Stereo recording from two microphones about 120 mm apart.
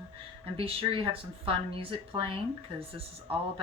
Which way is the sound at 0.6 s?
50° right (ahead or behind).